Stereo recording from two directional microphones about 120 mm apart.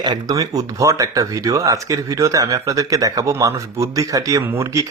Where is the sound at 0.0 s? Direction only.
35° right (ahead or behind).